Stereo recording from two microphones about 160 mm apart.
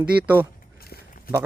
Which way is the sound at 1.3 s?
70° left (ahead or behind).